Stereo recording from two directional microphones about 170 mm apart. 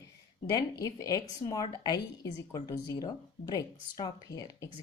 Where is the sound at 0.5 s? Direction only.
20° left (ahead or behind).